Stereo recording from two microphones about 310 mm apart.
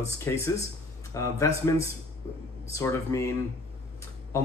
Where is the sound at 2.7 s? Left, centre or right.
Centre.